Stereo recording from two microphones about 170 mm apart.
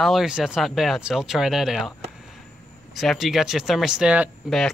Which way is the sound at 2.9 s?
Centre (ahead or behind).